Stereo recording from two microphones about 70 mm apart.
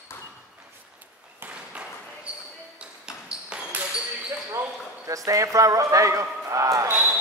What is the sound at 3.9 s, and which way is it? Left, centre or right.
Basketball bounce, centre.